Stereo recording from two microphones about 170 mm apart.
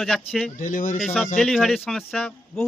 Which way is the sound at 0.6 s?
50° left (ahead or behind).